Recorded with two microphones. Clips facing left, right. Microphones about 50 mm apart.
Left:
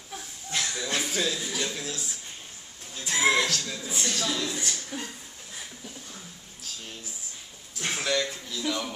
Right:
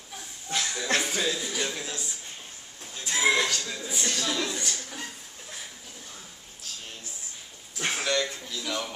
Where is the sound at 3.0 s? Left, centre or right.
Centre.